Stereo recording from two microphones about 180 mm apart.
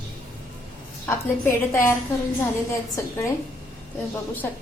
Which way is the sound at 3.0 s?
15° left (ahead or behind).